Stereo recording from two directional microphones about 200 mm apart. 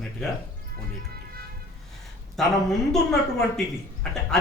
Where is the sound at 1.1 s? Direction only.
50° right (ahead or behind).